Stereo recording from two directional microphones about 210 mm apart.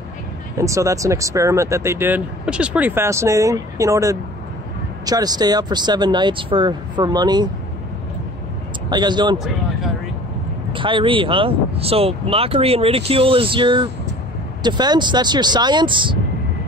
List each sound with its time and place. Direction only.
0.6 s speech: 15° right (ahead or behind)
8.9 s speech: 20° right (ahead or behind)
10.7 s speech: 25° right (ahead or behind)